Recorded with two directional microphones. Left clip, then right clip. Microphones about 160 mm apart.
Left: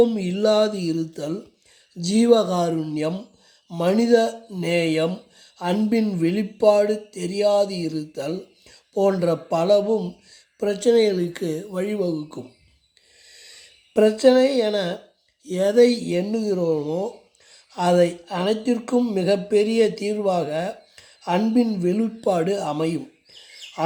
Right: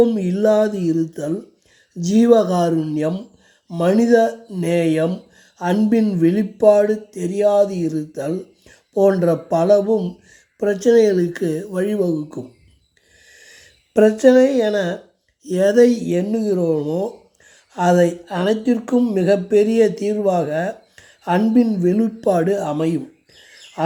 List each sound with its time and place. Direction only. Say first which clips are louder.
0.0 s speech: right 3 dB; 10° right (ahead or behind)
13.9 s speech: right 3 dB; 15° right (ahead or behind)